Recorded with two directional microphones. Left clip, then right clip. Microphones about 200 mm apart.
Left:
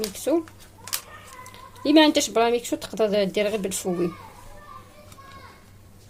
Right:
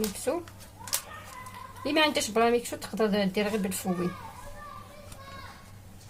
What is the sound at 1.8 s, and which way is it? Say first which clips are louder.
A woman's voice: left 8 dB; 35° left (ahead or behind).